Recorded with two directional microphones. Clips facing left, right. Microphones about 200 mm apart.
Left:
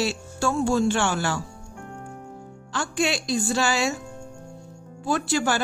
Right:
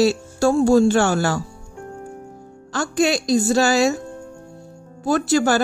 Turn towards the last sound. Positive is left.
turn(degrees=-40)  # may be behind; listen again after turning